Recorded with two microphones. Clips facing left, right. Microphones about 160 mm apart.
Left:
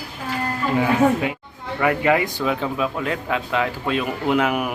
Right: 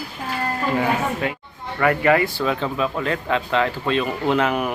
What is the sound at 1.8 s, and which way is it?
A man's voice, 15° left (ahead or behind).